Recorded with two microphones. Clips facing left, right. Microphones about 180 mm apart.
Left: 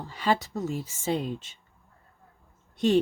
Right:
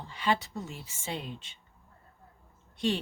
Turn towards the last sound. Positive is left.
turn(degrees=45)  # may be behind; listen again after turning